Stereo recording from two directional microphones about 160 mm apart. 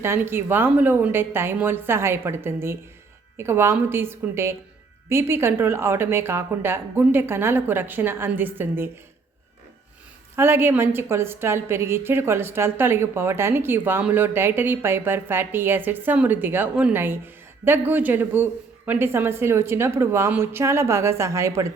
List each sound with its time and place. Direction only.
0.0 s a woman's voice: 15° right (ahead or behind)
10.3 s a woman's voice: 15° right (ahead or behind)